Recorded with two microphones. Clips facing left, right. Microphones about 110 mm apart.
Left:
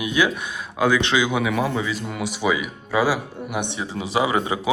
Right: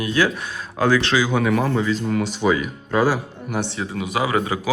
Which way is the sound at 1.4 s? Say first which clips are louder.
Right 3 dB; 5° left (ahead or behind).